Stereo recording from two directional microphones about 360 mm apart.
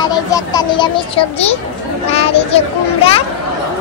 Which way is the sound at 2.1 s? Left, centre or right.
Centre.